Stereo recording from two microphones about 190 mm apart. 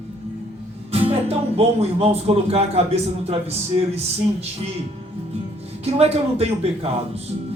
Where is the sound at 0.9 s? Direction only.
30° right (ahead or behind).